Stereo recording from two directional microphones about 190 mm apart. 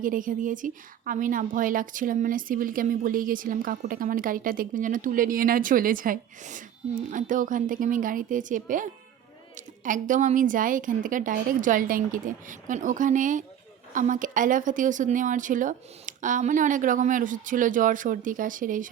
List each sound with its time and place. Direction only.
0.0 s a woman's voice: 45° right (ahead or behind)